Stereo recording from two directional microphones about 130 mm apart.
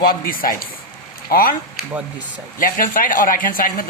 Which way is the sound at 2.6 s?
90° left.